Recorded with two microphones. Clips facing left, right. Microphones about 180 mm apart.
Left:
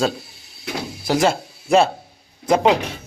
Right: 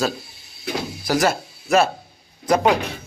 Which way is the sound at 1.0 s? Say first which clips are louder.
Left 2 dB; 25° left (ahead or behind).